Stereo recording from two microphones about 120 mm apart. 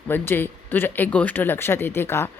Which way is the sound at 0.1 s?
20° left (ahead or behind).